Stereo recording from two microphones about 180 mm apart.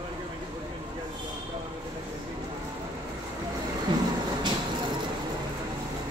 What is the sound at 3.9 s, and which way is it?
Vehicle, 25° right (ahead or behind).